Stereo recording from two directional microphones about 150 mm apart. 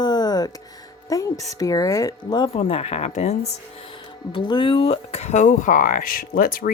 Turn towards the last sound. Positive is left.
turn(degrees=70)  # may be behind; listen again after turning